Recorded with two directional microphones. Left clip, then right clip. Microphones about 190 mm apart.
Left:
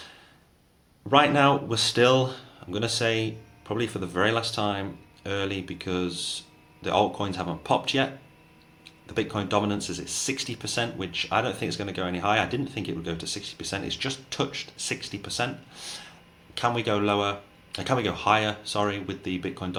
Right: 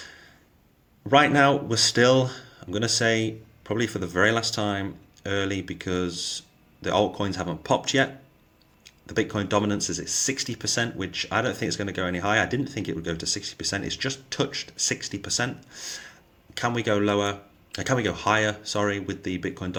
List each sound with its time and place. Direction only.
1.1 s speech: 45° right (ahead or behind)